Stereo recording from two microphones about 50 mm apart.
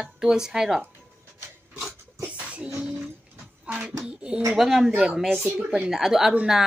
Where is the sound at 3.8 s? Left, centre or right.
Right.